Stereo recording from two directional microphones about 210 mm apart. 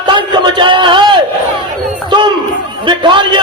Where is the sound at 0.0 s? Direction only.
20° right (ahead or behind).